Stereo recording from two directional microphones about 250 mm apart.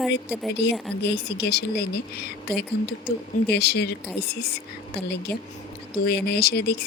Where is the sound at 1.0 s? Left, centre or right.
Left.